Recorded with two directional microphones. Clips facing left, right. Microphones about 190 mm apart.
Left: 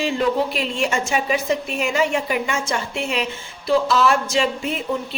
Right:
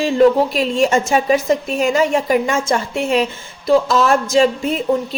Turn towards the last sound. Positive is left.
turn(degrees=-40)  # may be behind; listen again after turning